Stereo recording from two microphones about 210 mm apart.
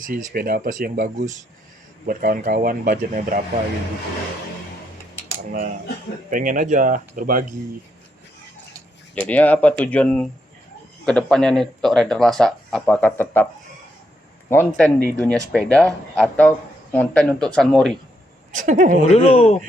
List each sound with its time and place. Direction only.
0.0 s speech: 40° right (ahead or behind)
6.3 s speech: 40° right (ahead or behind)
9.1 s speech: 5° left (ahead or behind)
14.5 s speech: 10° left (ahead or behind)
18.5 s speech: 40° right (ahead or behind)
19.0 s speech: 30° left (ahead or behind)